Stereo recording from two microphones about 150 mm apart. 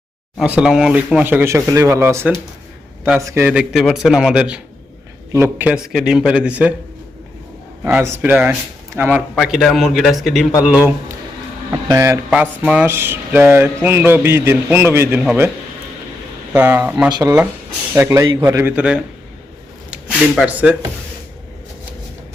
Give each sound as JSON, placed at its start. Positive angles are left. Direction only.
{"t": 0.3, "sound": "a man's voice", "side_deg": -5}
{"t": 7.9, "sound": "speech", "side_deg": -20}
{"t": 9.3, "sound": "a man's voice", "side_deg": 0}
{"t": 11.7, "sound": "speech", "side_deg": -20}
{"t": 12.3, "sound": "speech", "side_deg": -5}
{"t": 16.5, "sound": "speech", "side_deg": -10}
{"t": 17.1, "sound": "speech", "side_deg": -25}